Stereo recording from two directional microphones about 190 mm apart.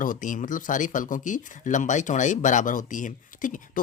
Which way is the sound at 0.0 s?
45° left (ahead or behind).